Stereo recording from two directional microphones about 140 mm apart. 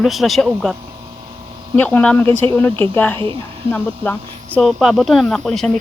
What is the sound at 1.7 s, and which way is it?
Speech, 10° left (ahead or behind).